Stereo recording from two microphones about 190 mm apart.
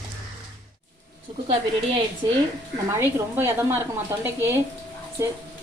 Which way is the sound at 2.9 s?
15° right (ahead or behind).